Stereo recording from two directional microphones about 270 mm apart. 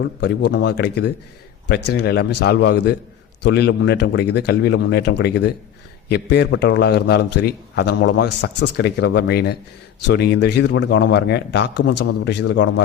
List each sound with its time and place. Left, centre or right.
0.0 s a man's voice: left